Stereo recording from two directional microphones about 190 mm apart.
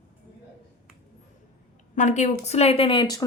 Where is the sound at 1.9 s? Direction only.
40° left (ahead or behind); by 3.2 s 25° left (ahead or behind).